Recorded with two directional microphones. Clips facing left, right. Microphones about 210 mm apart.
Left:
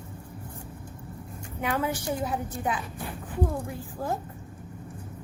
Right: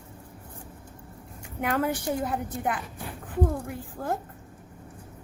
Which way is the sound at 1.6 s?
55° right (ahead or behind).